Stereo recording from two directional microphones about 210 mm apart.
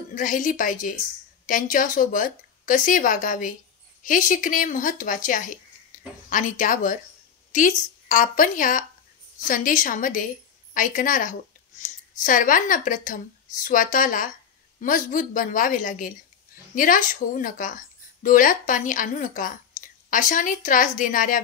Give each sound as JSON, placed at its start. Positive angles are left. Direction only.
{"t": 0.1, "sound": "a woman's voice", "side_deg": 40}
{"t": 19.7, "sound": "a sound", "side_deg": 40}
{"t": 20.1, "sound": "a woman's voice", "side_deg": 40}